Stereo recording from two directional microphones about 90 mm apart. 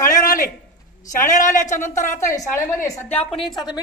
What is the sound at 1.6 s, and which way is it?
A woman's voice, 30° left (ahead or behind).